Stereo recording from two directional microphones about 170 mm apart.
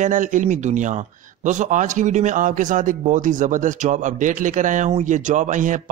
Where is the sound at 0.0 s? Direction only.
50° right (ahead or behind).